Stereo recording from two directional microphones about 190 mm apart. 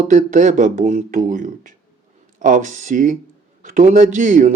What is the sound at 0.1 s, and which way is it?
Speech, 40° right (ahead or behind).